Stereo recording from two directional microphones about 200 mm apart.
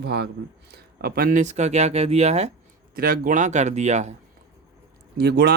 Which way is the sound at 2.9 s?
45° right (ahead or behind).